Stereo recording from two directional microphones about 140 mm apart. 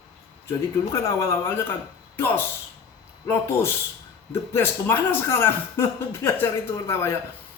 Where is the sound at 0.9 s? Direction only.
20° left (ahead or behind).